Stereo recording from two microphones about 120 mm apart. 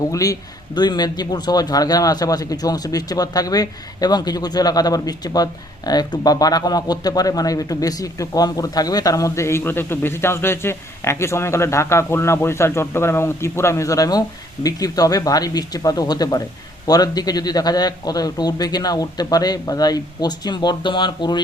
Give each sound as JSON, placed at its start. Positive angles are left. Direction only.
{"t": 0.1, "sound": "a man's voice", "side_deg": 30}